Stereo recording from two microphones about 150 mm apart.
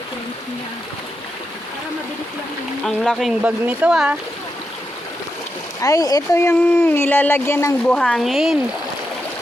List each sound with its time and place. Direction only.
2.8 s speech: centre (ahead or behind)
5.8 s speech: 25° left (ahead or behind)
7.9 s speech: 5° left (ahead or behind)